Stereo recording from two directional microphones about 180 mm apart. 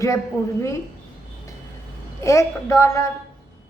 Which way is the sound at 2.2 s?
15° left (ahead or behind).